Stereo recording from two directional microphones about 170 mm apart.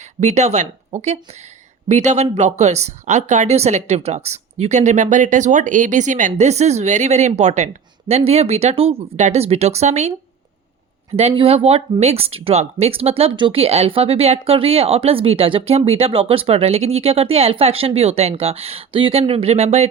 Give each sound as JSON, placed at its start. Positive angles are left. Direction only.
{"t": 0.2, "sound": "speech", "side_deg": -40}
{"t": 11.2, "sound": "speech", "side_deg": -35}